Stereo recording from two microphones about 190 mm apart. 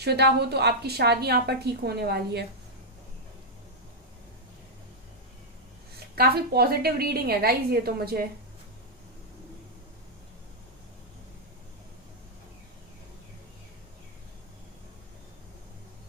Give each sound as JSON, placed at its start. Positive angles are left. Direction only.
{"t": 0.0, "sound": "a woman's voice", "side_deg": -60}
{"t": 6.1, "sound": "a woman's voice", "side_deg": -55}